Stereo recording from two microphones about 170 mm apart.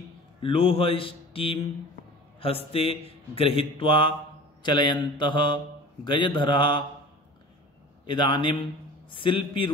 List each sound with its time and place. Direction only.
0.4 s a man's voice: 30° left (ahead or behind)
4.6 s mantra: 25° left (ahead or behind)
8.1 s mantra: 30° left (ahead or behind)